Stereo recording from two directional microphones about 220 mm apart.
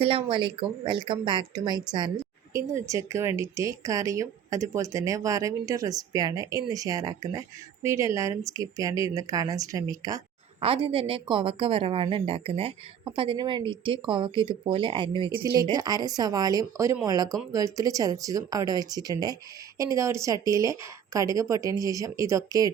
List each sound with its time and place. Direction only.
0.0 s a woman's voice: 25° right (ahead or behind)